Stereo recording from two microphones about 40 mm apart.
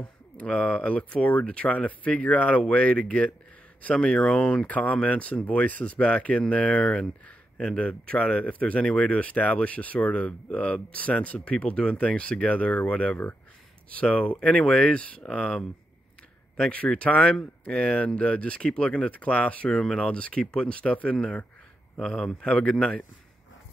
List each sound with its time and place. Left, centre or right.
0.4 s speech: left
4.6 s speech: left
16.7 s speech: left
22.1 s speech: centre